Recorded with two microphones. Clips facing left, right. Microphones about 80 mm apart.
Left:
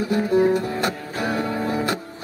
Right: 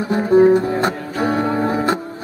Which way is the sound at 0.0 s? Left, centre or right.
Right.